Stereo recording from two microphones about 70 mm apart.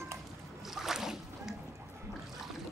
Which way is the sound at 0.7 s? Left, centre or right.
Centre.